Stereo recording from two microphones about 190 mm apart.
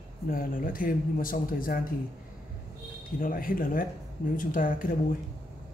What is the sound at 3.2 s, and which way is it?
Speech, 45° left (ahead or behind).